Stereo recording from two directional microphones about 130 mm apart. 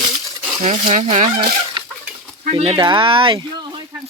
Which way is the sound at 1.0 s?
60° right (ahead or behind).